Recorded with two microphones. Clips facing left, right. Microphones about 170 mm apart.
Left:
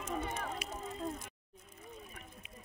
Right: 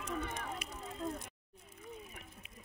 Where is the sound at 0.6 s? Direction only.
50° right (ahead or behind).